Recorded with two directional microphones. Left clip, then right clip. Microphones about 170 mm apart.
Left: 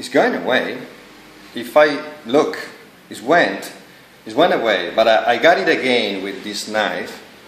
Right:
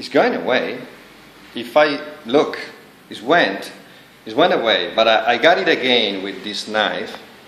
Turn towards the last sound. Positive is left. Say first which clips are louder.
# even
turn(degrees=5)  # may be behind; listen again after turning